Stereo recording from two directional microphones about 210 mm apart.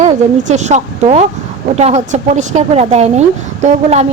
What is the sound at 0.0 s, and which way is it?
A woman's voice, 35° right (ahead or behind).